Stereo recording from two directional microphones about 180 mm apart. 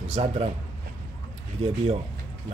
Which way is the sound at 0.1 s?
35° right (ahead or behind).